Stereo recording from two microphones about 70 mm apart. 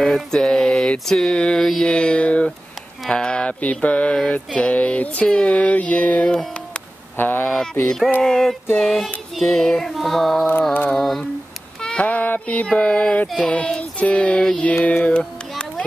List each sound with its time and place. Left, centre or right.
0.0 s mantra: centre
7.2 s speech: left
8.1 s music: centre
9.3 s mantra: centre
9.9 s music: centre
11.8 s a sound: centre
12.6 s mantra: centre
14.9 s music: centre